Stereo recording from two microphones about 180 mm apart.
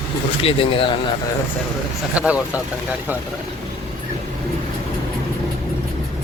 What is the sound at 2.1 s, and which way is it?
Speech, 5° right (ahead or behind).